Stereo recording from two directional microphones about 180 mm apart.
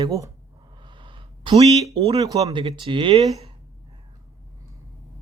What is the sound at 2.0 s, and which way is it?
Speech, 30° right (ahead or behind).